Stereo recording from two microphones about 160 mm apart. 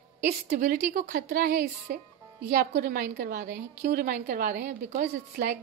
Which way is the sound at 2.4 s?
90° right.